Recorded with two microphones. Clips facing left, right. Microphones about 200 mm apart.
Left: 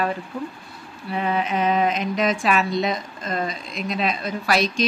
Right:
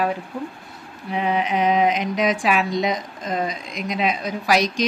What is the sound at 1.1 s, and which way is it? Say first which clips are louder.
Speech: right 1 dB; 15° right (ahead or behind).